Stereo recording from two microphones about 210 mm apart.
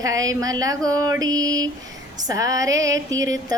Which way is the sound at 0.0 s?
15° right (ahead or behind).